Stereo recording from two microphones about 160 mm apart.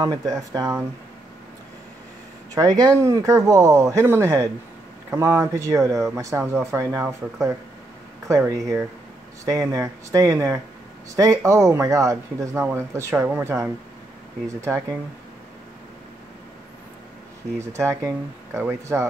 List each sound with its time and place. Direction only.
0.0 s speech: 25° right (ahead or behind)
2.6 s speech: 20° right (ahead or behind)
8.3 s speech: 20° right (ahead or behind)
17.6 s speech: 15° right (ahead or behind)